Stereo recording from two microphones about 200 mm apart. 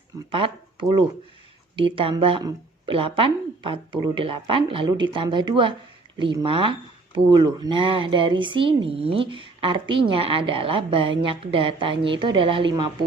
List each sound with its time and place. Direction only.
0.3 s speech: 25° right (ahead or behind)